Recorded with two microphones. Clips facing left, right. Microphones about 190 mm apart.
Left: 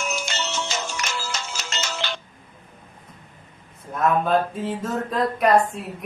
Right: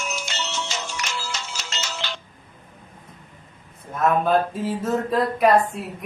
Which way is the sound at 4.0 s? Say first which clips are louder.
Right 1 dB; centre (ahead or behind).